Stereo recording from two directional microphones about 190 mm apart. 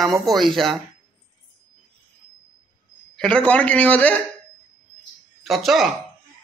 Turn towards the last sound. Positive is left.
turn(degrees=0)  # may be behind; listen again after turning